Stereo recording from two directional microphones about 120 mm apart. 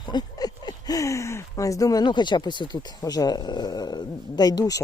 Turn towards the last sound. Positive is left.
turn(degrees=30)  # may be behind; listen again after turning